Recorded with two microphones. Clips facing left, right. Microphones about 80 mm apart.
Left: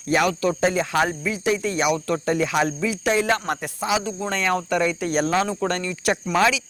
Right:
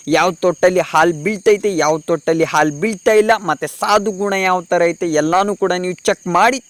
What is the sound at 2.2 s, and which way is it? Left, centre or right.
Speech, right.